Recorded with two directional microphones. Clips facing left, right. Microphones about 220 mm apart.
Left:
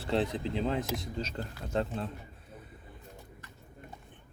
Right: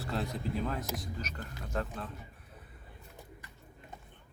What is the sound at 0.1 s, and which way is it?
Speech, 20° left (ahead or behind).